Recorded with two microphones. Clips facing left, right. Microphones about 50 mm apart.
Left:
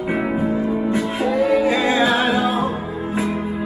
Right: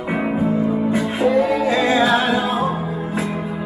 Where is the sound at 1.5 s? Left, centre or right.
Centre.